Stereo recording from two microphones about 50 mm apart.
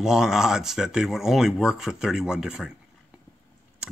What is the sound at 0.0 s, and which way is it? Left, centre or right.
Speech, centre.